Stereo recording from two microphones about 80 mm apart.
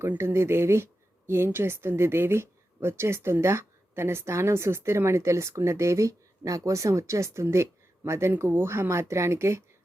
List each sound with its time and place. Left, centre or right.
0.0 s speech: right